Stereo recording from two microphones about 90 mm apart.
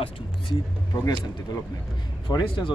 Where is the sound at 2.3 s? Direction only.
55° left (ahead or behind).